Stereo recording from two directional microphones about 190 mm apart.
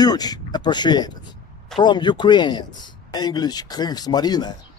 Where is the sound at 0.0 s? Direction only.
20° left (ahead or behind).